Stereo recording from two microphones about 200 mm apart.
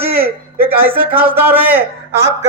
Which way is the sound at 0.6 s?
10° right (ahead or behind).